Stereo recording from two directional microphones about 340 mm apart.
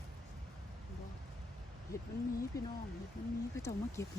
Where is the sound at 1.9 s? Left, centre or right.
Centre.